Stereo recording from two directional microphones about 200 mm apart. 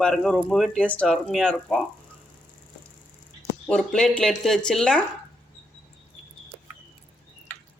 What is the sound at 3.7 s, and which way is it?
Speech, 5° left (ahead or behind).